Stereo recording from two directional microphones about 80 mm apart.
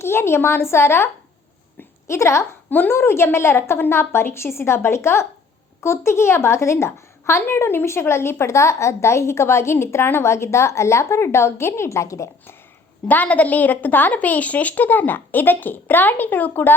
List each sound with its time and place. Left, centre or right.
0.0 s a woman's voice: left
2.6 s a woman's voice: left
13.1 s a woman's voice: centre